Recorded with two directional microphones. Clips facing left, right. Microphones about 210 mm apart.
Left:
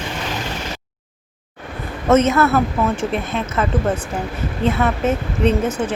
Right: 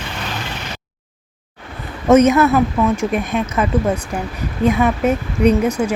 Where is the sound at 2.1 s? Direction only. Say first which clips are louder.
Right 3 dB; 15° right (ahead or behind).